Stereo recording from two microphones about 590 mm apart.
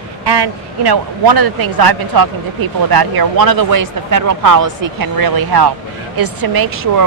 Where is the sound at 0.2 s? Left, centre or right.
Right.